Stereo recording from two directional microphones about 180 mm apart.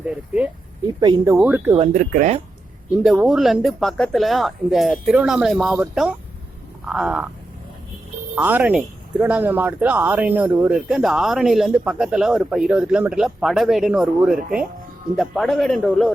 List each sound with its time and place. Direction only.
0.0 s speech: 5° right (ahead or behind)
0.9 s speech: 25° right (ahead or behind)
1.4 s speech: 10° right (ahead or behind)
1.9 s speech: 45° right (ahead or behind)
2.9 s speech: 5° right (ahead or behind)
8.4 s speech: 10° right (ahead or behind)